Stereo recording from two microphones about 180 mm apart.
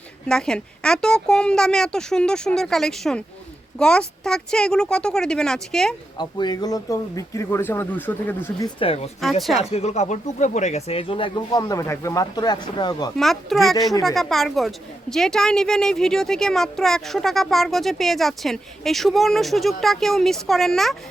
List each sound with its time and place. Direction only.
0.3 s speech: 5° left (ahead or behind)
6.1 s speech: 25° left (ahead or behind)
8.6 s speech: 30° left (ahead or behind)
9.4 s speech: centre (ahead or behind)
9.7 s speech: 40° left (ahead or behind); by 13.1 s 20° left (ahead or behind)
13.1 s speech: centre (ahead or behind)